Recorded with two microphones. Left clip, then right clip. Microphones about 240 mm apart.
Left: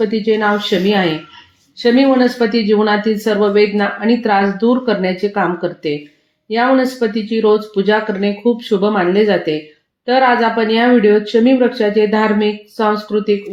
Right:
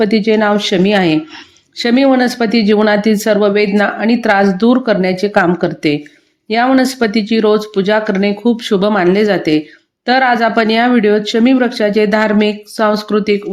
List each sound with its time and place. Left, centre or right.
0.0 s speech: right